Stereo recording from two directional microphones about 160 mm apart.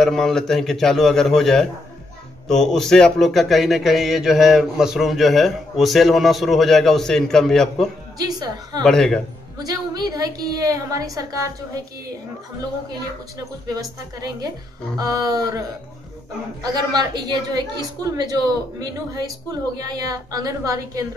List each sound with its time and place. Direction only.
0.0 s a man's voice: 5° left (ahead or behind)
8.2 s a woman's voice: 25° right (ahead or behind)
8.8 s a man's voice: 5° left (ahead or behind)
9.6 s a woman's voice: 25° right (ahead or behind)
15.0 s a woman's voice: 25° right (ahead or behind)
16.6 s a woman's voice: 25° right (ahead or behind)